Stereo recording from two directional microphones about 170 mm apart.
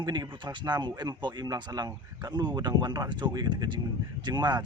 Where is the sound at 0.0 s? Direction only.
25° right (ahead or behind).